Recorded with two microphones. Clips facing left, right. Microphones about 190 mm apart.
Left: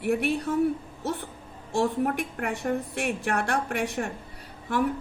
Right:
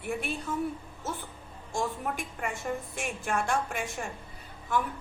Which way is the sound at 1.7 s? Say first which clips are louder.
Left 7 dB; 65° left (ahead or behind).